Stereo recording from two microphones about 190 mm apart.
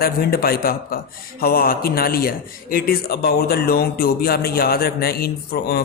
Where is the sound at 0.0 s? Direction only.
50° left (ahead or behind).